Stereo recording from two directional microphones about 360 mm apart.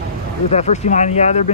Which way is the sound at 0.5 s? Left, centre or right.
Centre.